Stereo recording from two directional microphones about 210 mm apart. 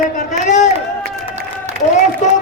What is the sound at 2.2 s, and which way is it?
Speech, 35° left (ahead or behind).